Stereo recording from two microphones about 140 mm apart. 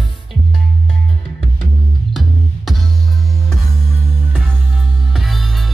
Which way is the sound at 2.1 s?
Centre (ahead or behind).